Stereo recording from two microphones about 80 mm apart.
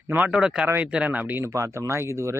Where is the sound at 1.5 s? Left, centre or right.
Right.